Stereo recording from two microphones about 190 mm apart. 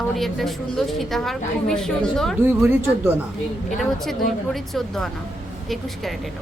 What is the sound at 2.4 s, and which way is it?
Speech, 10° right (ahead or behind).